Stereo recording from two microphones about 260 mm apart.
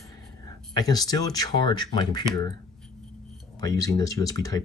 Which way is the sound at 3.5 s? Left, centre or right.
Centre.